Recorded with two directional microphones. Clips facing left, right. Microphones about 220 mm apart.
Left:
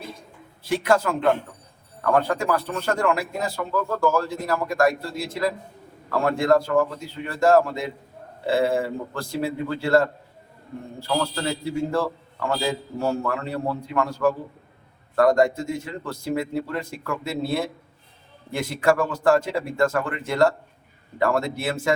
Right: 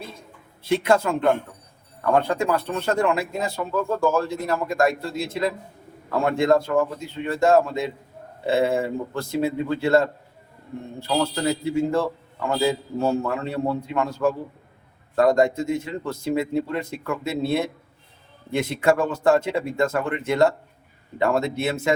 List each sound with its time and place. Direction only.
0.6 s speech: 25° right (ahead or behind)